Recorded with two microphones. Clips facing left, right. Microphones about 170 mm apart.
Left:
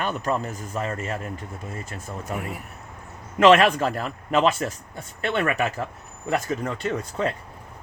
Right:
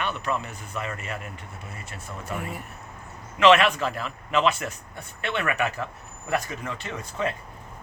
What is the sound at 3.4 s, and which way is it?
Speech, 45° left (ahead or behind).